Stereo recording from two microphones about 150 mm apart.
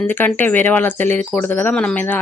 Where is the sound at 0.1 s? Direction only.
15° left (ahead or behind).